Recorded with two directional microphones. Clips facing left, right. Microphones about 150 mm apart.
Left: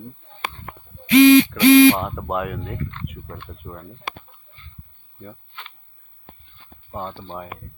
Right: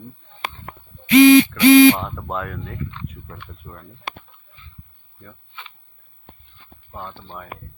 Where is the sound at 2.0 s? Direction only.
15° left (ahead or behind).